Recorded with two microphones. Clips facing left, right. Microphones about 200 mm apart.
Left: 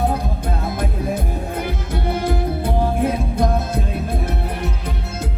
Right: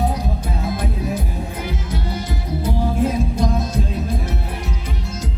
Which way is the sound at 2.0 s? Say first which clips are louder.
Left 10 dB; 55° left (ahead or behind).